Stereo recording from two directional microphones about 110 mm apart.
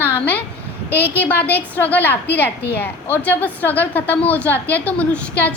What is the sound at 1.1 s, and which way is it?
A child's voice, 15° left (ahead or behind).